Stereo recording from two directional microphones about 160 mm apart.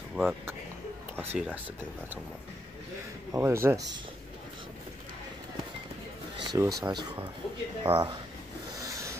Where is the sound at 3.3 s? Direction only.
15° right (ahead or behind).